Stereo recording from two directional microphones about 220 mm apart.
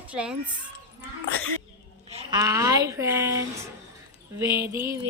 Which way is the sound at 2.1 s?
15° right (ahead or behind).